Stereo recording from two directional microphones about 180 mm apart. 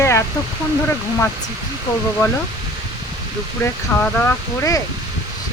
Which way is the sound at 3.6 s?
10° left (ahead or behind).